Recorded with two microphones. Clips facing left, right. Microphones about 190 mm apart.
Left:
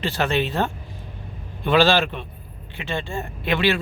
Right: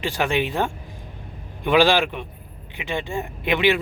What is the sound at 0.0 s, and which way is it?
Speech, 15° right (ahead or behind).